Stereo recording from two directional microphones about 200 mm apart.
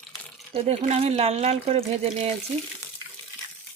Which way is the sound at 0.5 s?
30° right (ahead or behind).